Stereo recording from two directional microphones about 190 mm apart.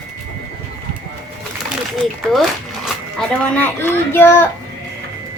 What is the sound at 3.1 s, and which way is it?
A woman's voice, 10° left (ahead or behind).